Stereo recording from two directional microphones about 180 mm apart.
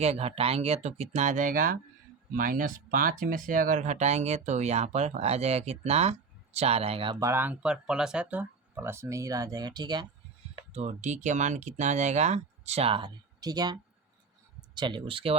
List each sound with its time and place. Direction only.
0.0 s speech: 35° right (ahead or behind)
10.7 s speech: 40° right (ahead or behind); by 13.7 s 20° right (ahead or behind)
14.8 s speech: 25° right (ahead or behind)